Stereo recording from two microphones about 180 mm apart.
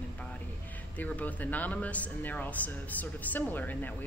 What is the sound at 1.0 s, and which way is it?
Speech, 10° left (ahead or behind).